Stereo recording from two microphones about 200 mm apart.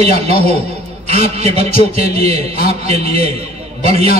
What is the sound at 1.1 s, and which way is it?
A man's voice, 30° right (ahead or behind).